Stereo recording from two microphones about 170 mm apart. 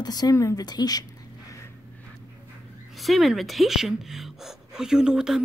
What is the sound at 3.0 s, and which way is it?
Speech, centre (ahead or behind).